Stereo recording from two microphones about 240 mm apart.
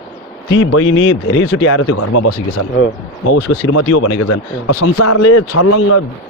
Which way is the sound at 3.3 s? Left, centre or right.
Left.